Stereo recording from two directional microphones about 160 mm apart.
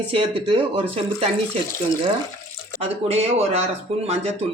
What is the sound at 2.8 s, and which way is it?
Speech, 40° right (ahead or behind).